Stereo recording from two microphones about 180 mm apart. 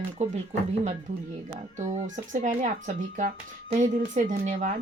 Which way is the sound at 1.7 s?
40° right (ahead or behind).